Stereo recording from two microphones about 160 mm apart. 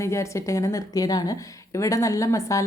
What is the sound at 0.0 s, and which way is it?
A woman's voice, 20° left (ahead or behind).